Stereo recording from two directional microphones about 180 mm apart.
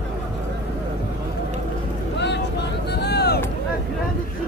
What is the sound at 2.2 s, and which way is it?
Vehicle, 75° left (ahead or behind).